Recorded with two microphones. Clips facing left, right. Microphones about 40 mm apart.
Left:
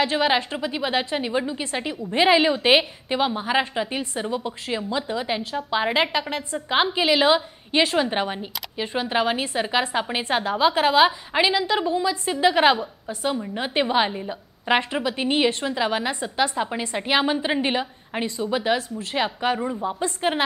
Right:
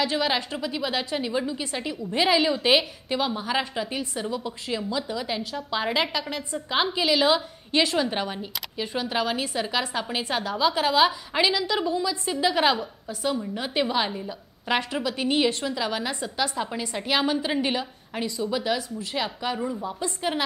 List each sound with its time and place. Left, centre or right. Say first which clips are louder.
0.0 s a woman's voice: left 4 dB; left